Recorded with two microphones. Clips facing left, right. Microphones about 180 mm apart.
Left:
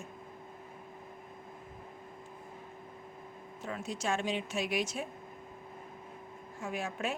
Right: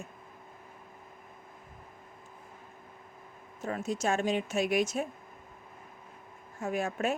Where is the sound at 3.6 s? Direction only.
45° right (ahead or behind).